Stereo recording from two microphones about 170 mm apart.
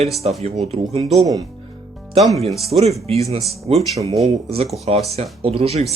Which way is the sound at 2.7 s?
35° right (ahead or behind).